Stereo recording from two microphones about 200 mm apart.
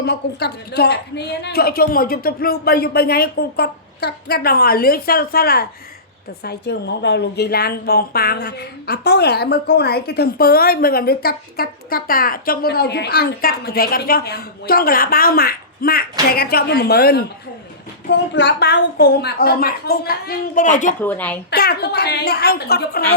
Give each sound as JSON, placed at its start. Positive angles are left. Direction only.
{"t": 0.0, "sound": "a woman's voice", "side_deg": 55}
{"t": 21.0, "sound": "a woman's voice", "side_deg": 10}
{"t": 21.5, "sound": "a woman's voice", "side_deg": 50}